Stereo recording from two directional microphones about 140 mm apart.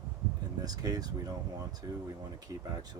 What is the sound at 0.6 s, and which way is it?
Speech, 30° right (ahead or behind).